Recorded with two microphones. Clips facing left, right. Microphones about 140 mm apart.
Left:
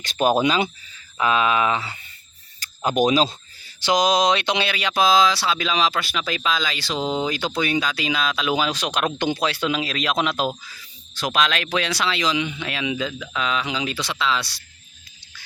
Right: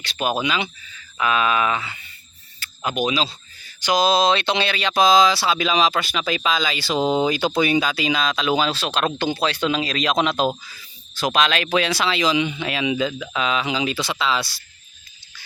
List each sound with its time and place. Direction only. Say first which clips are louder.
0.0 s speech: left 4 dB; 40° left (ahead or behind)
1.2 s speech: left 1 dB; 20° left (ahead or behind)
2.6 s speech: left 4 dB; 40° left (ahead or behind)
3.6 s mantra: even; 25° left (ahead or behind)
4.0 s speech: right 2 dB; 15° left (ahead or behind); by 14.5 s 5° right (ahead or behind)